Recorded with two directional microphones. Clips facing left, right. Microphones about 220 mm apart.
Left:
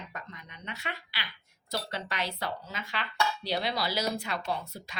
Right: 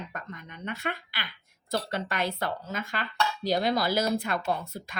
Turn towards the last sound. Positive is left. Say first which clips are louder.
# right 4 dB
turn(degrees=-50)  # may be behind; listen again after turning